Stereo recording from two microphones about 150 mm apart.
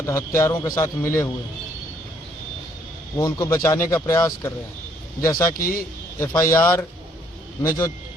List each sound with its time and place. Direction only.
0.0 s speech: 20° left (ahead or behind)
3.2 s speech: 25° left (ahead or behind)
5.5 s a man's voice: 70° left (ahead or behind)
6.1 s speech: 20° left (ahead or behind)